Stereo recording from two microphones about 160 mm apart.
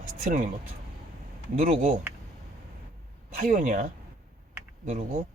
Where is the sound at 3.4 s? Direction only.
55° right (ahead or behind).